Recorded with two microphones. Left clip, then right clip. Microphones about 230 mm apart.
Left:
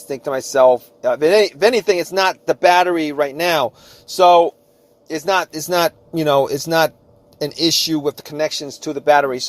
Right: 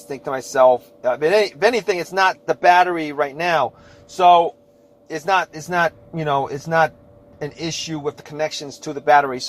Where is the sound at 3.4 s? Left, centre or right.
Left.